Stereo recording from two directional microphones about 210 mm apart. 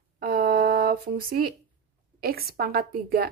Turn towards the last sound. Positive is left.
turn(degrees=-45)  # may be behind; listen again after turning